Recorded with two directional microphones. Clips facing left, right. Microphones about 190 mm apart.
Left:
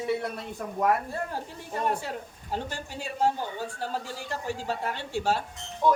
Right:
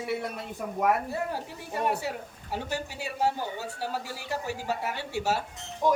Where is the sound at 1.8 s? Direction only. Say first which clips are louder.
Even; 10° right (ahead or behind).